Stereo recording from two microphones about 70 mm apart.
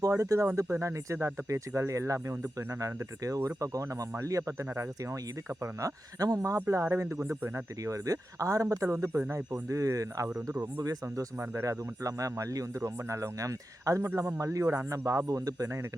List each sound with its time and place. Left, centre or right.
0.0 s speech: right
5.8 s speech: right
6.7 s speech: right
7.9 s speech: right
11.3 s speech: right